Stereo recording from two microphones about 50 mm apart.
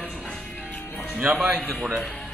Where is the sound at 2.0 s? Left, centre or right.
Left.